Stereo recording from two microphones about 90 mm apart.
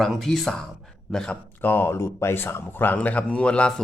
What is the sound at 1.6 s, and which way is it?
Speech, 25° left (ahead or behind).